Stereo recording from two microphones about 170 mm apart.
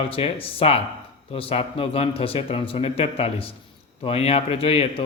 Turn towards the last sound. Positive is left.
turn(degrees=35)  # may be behind; listen again after turning